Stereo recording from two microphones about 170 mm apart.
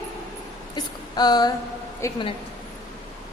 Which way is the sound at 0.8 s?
25° left (ahead or behind).